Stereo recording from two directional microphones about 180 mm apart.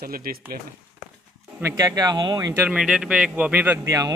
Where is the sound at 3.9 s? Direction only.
20° right (ahead or behind).